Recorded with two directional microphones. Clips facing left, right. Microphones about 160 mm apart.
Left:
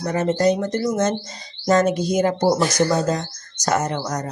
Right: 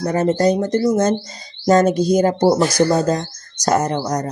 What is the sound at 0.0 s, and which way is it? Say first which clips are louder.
Speech: right 3 dB; 40° right (ahead or behind).